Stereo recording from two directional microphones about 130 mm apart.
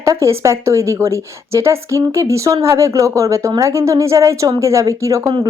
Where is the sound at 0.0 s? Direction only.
20° right (ahead or behind).